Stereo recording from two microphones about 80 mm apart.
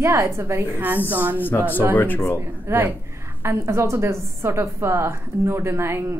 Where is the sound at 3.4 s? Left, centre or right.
Right.